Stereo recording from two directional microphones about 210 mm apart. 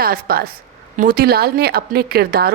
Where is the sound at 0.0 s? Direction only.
45° right (ahead or behind).